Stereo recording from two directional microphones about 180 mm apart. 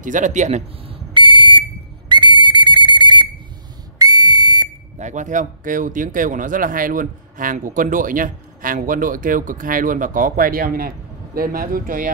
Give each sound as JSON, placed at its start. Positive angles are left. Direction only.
{"t": 0.0, "sound": "speech", "side_deg": -45}
{"t": 1.1, "sound": "fire alarm", "side_deg": -25}
{"t": 2.0, "sound": "whistle", "side_deg": -25}
{"t": 4.9, "sound": "speech", "side_deg": -45}